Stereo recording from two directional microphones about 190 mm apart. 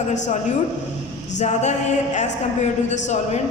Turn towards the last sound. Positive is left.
turn(degrees=40)  # may be behind; listen again after turning